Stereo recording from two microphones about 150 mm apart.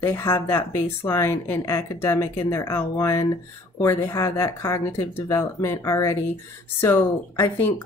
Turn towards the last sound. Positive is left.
turn(degrees=15)  # may be behind; listen again after turning